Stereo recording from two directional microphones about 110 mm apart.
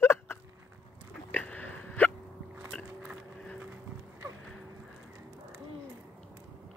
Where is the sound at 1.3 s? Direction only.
15° left (ahead or behind).